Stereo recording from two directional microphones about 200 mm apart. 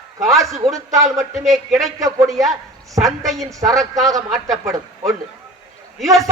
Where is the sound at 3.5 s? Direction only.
15° right (ahead or behind).